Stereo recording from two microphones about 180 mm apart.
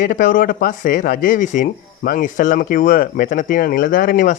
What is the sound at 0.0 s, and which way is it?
Speech, 45° left (ahead or behind).